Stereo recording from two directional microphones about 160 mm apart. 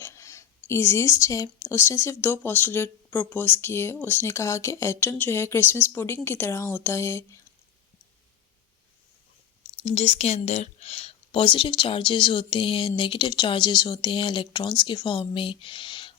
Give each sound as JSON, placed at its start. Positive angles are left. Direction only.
{"t": 0.0, "sound": "speech", "side_deg": 20}
{"t": 9.8, "sound": "speech", "side_deg": 40}